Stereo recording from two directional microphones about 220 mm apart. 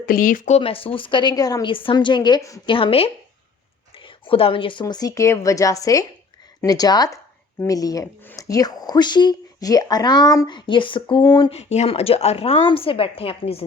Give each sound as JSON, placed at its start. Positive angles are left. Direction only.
{"t": 0.0, "sound": "speech", "side_deg": 40}